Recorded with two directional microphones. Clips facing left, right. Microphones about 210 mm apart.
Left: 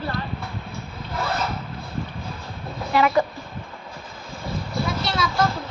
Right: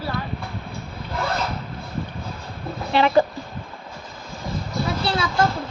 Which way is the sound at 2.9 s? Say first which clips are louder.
Right 2 dB; 30° right (ahead or behind).